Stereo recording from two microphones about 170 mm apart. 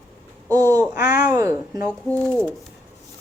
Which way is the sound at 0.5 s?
20° right (ahead or behind).